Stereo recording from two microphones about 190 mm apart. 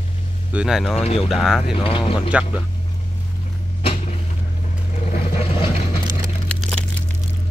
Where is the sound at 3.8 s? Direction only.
30° left (ahead or behind).